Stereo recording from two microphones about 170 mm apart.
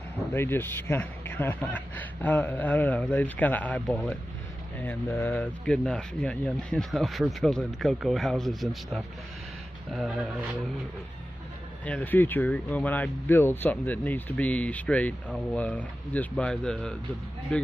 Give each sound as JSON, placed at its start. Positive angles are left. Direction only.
{"t": 0.3, "sound": "speech", "side_deg": 15}
{"t": 4.7, "sound": "speech", "side_deg": 10}
{"t": 11.8, "sound": "speech", "side_deg": 10}